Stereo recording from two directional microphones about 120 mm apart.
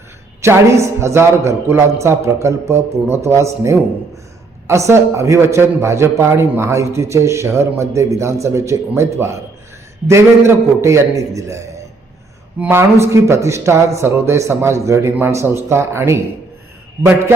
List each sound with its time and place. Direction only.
0.4 s a man's voice: 25° right (ahead or behind)